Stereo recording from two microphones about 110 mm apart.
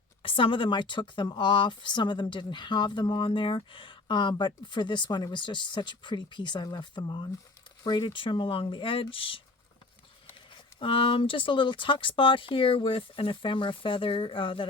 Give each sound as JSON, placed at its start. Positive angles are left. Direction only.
{"t": 0.2, "sound": "speech", "side_deg": 55}
{"t": 10.8, "sound": "speech", "side_deg": 55}